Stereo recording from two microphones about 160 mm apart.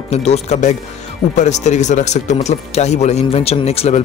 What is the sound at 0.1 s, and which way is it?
Speech, 45° left (ahead or behind).